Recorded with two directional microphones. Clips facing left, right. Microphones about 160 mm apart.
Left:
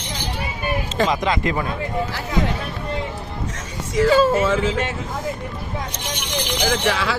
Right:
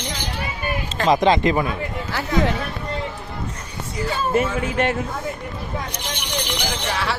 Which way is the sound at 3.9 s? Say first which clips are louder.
Left 6 dB; 90° left.